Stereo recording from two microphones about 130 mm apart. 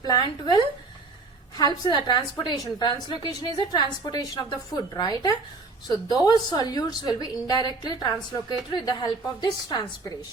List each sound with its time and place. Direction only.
0.0 s a woman's voice: 30° left (ahead or behind)
1.5 s a woman's voice: 30° left (ahead or behind)